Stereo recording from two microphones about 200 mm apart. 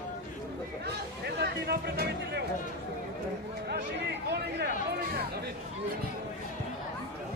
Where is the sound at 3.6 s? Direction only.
55° right (ahead or behind).